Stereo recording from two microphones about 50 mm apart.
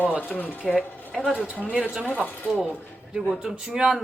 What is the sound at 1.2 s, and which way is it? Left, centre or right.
Speech, right.